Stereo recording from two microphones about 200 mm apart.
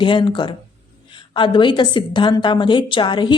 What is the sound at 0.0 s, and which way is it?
A woman's voice, 25° left (ahead or behind).